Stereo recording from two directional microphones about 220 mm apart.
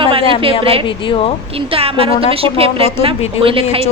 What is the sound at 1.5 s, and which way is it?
A woman's voice, 25° right (ahead or behind).